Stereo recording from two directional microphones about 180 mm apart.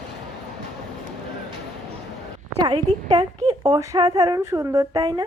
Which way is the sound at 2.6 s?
25° right (ahead or behind).